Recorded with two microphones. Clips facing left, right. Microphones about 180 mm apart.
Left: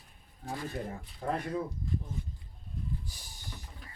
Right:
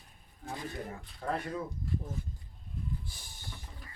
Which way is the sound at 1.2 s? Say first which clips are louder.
Left 1 dB; 15° left (ahead or behind).